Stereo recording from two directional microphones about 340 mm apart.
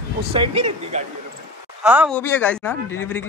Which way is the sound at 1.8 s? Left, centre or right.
Centre.